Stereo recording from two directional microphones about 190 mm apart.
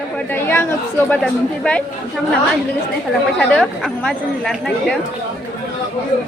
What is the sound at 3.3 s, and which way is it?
Speech, 5° left (ahead or behind).